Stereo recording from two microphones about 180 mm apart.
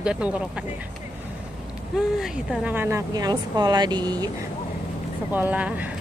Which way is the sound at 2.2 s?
Centre (ahead or behind).